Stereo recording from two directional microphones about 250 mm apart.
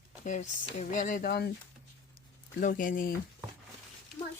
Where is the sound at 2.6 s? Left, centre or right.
Left.